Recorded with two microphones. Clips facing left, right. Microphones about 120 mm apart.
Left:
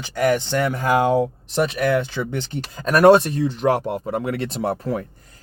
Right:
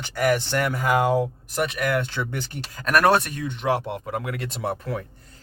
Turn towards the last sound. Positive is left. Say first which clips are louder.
# left 5 dB
turn(degrees=35)  # may be behind; listen again after turning